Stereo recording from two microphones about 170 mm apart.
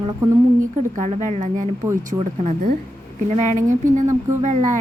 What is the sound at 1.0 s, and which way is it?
Speech, 45° right (ahead or behind).